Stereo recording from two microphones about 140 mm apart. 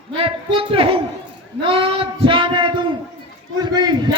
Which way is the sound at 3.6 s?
30° right (ahead or behind).